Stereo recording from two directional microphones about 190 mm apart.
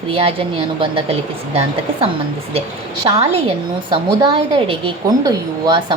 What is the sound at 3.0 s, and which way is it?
A woman's voice, 30° right (ahead or behind).